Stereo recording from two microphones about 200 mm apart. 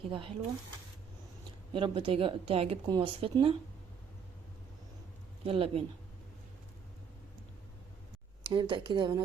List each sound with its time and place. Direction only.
0.1 s speech: 25° right (ahead or behind)
1.7 s speech: 25° right (ahead or behind)
5.4 s speech: 30° right (ahead or behind)
8.4 s speech: 25° right (ahead or behind)